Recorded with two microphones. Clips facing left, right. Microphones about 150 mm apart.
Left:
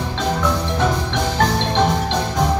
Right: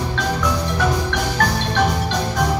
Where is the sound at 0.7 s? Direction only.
20° left (ahead or behind).